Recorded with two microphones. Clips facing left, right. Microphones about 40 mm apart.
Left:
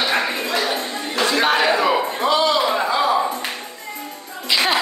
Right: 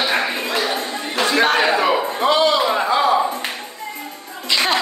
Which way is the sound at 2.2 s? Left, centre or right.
Right.